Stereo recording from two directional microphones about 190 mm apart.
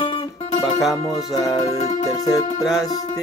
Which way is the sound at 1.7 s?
35° left (ahead or behind).